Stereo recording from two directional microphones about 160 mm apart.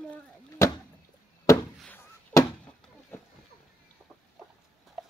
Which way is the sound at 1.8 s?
15° left (ahead or behind).